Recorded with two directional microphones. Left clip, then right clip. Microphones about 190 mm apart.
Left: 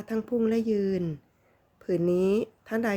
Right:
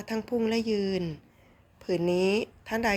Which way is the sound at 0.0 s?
40° left (ahead or behind).